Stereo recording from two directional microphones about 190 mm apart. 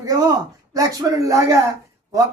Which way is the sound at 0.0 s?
15° right (ahead or behind).